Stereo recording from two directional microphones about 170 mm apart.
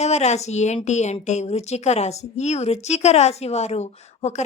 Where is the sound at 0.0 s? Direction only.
40° left (ahead or behind).